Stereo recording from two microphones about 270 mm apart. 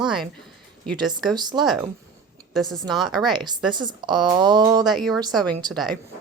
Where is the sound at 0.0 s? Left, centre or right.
Centre.